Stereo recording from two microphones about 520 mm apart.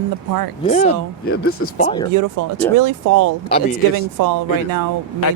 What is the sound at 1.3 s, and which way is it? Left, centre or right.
Speech, left.